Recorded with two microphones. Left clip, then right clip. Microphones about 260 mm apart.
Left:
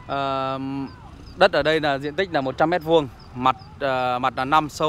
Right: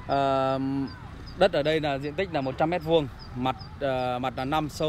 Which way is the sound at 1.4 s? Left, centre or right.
Centre.